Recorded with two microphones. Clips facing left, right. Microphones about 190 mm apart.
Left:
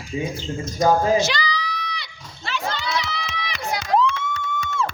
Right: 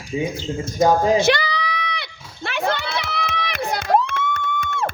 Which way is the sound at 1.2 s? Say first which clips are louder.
Right 5 dB; 55° right (ahead or behind).